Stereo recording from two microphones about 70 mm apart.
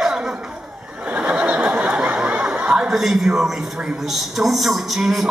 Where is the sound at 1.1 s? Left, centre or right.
Centre.